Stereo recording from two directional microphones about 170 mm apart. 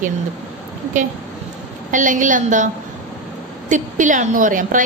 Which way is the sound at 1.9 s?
50° right (ahead or behind).